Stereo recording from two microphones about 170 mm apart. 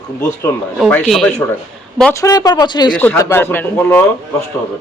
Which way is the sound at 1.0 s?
Centre (ahead or behind).